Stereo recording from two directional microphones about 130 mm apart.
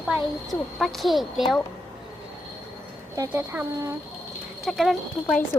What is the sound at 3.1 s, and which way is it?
Speech, 20° right (ahead or behind).